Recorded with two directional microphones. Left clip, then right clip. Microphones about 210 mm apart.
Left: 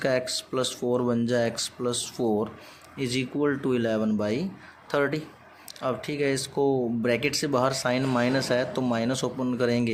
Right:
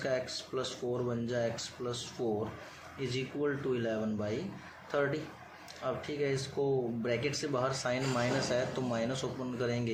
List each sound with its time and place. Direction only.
0.0 s speech: 55° left (ahead or behind)